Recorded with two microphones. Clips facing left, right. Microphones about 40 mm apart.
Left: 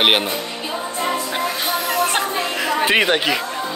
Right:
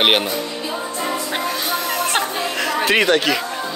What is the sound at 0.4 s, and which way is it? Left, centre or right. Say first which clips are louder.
Music: right 1 dB; centre.